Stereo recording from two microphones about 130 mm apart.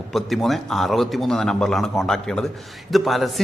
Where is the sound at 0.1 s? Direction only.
Centre (ahead or behind).